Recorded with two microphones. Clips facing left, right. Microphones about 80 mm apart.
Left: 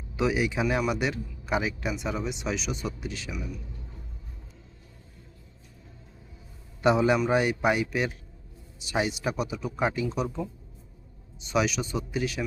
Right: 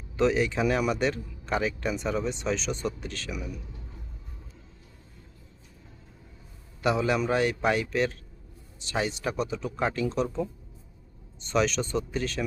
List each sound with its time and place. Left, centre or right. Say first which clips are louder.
0.2 s speech: right 2 dB; centre
3.3 s speech: even; centre
6.8 s a man's voice: left 3 dB; left